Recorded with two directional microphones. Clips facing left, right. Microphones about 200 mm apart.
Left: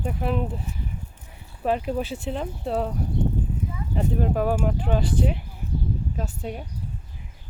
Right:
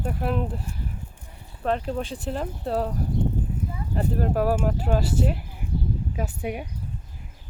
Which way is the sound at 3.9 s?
Centre (ahead or behind).